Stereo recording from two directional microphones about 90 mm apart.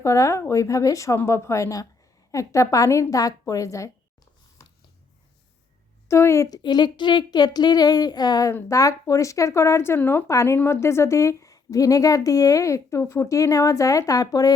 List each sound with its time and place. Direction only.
0.0 s speech: 35° left (ahead or behind)
6.1 s speech: 30° left (ahead or behind)
6.5 s speech: 50° left (ahead or behind)